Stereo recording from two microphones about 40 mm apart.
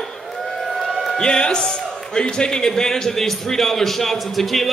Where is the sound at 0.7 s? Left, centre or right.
Centre.